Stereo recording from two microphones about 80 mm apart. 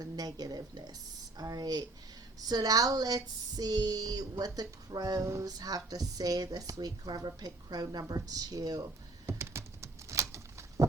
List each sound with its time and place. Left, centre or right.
0.0 s a woman's voice: right
5.5 s a woman's voice: right
9.2 s a sound: right